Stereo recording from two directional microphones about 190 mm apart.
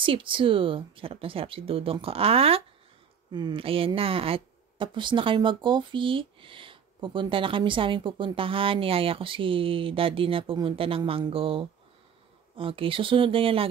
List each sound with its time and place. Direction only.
0.0 s speech: 25° right (ahead or behind)